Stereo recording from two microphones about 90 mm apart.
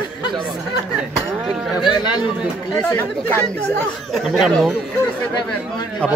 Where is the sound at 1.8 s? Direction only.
55° left (ahead or behind).